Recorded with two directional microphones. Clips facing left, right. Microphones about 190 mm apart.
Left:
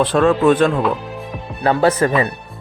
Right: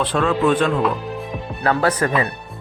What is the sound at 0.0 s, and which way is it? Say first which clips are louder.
Speech: left 5 dB; 45° left (ahead or behind).